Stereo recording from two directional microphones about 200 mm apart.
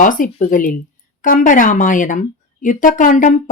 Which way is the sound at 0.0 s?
40° left (ahead or behind).